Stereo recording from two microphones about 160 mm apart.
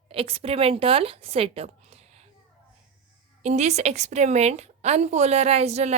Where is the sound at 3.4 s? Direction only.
45° right (ahead or behind).